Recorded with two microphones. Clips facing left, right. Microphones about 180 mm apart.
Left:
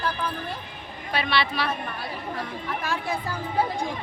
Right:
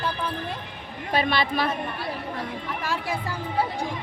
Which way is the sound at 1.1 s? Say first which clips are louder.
Right 2 dB; 45° right (ahead or behind).